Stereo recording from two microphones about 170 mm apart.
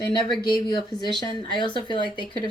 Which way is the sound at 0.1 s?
25° left (ahead or behind).